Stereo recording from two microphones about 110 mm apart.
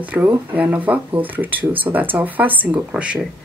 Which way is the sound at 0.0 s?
15° right (ahead or behind).